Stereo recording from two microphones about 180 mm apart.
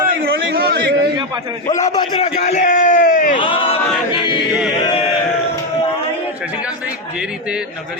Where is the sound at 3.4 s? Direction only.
30° left (ahead or behind).